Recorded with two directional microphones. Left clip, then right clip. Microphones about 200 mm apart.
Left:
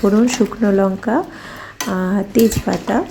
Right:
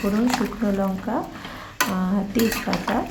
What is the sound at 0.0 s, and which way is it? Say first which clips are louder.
A woman's voice: left 8 dB; 25° left (ahead or behind).